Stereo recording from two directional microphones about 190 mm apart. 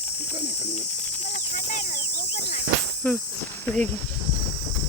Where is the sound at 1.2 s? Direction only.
40° left (ahead or behind).